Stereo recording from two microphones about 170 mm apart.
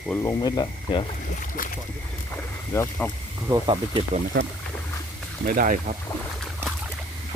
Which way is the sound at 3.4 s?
25° right (ahead or behind).